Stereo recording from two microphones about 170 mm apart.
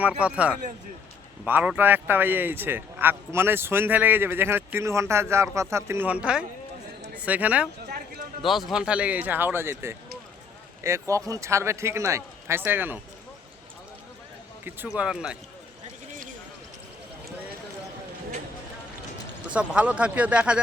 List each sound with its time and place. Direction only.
0.2 s speech: 5° right (ahead or behind)
11.1 s speech: 20° right (ahead or behind)
14.9 s speech: 5° right (ahead or behind)
19.5 s speech: 5° right (ahead or behind)